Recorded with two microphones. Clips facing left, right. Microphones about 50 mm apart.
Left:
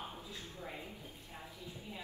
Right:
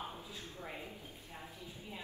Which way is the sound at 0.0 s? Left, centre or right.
Right.